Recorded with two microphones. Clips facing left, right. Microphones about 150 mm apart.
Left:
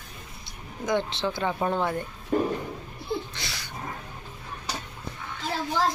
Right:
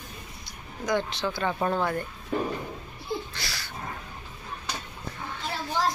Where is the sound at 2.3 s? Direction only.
45° left (ahead or behind).